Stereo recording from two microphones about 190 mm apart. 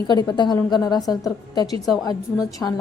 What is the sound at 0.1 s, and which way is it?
A woman's voice, 20° left (ahead or behind).